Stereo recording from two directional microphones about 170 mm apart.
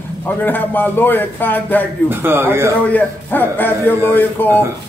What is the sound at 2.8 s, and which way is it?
A man's voice, 10° left (ahead or behind).